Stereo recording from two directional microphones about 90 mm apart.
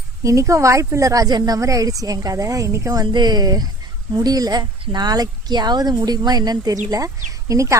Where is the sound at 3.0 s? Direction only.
55° right (ahead or behind).